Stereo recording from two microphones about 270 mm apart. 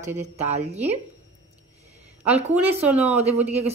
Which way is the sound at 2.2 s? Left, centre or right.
Centre.